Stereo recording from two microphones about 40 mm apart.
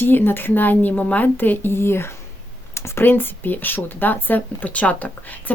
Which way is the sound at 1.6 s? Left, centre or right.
Left.